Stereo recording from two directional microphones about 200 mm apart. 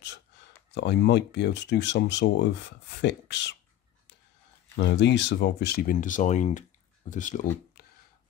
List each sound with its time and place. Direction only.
0.0 s speech: 60° left (ahead or behind)
4.7 s speech: 60° left (ahead or behind); by 7.4 s 40° left (ahead or behind)